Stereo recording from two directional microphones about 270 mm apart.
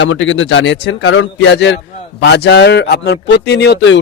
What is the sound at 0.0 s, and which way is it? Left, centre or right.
A man's voice, left.